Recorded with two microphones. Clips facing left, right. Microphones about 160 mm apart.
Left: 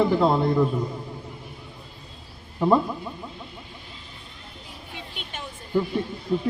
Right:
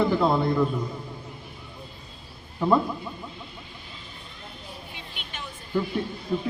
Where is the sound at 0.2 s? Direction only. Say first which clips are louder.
Left 2 dB; 20° left (ahead or behind).